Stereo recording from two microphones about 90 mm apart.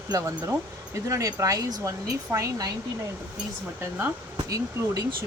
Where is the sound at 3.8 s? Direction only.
20° right (ahead or behind).